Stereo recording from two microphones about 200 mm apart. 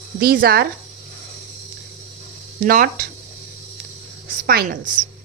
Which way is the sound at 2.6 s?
45° right (ahead or behind).